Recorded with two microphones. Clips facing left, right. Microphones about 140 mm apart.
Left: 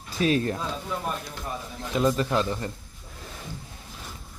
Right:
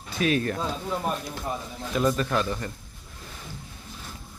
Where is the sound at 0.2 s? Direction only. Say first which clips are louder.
Left 1 dB; 30° left (ahead or behind).